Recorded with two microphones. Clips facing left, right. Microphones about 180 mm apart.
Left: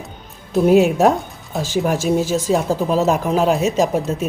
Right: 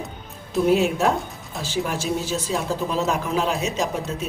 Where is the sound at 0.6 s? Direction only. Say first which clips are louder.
Left 6 dB; 45° left (ahead or behind).